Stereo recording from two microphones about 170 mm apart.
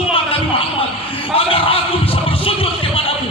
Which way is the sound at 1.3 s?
35° left (ahead or behind).